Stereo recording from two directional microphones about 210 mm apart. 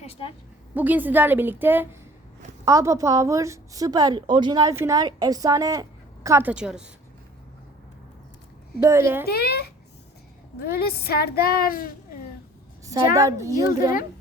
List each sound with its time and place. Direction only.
0.0 s a sound: 30° left (ahead or behind)
0.7 s a woman's voice: 10° right (ahead or behind)
8.8 s a woman's voice: 15° right (ahead or behind)
9.2 s a woman's voice: 50° left (ahead or behind)
12.8 s a woman's voice: 15° right (ahead or behind)